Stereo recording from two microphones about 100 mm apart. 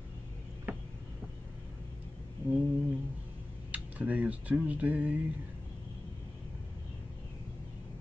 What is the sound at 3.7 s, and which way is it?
Speech, 15° right (ahead or behind).